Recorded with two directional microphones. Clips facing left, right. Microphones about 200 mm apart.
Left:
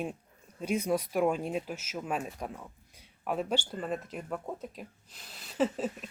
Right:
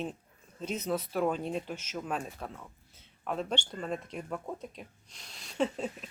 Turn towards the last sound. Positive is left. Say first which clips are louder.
# left 2 dB
turn(degrees=5)  # may be behind; listen again after turning